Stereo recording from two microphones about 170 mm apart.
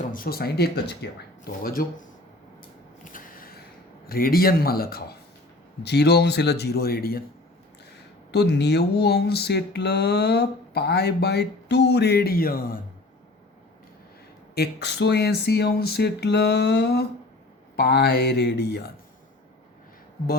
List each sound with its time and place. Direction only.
0.1 s speech: 60° left (ahead or behind)
3.0 s a sound: 55° left (ahead or behind)
4.0 s speech: 60° left (ahead or behind)
5.8 s speech: 75° left (ahead or behind)
8.3 s speech: 80° left; by 12.8 s 55° left (ahead or behind)
14.5 s speech: 80° left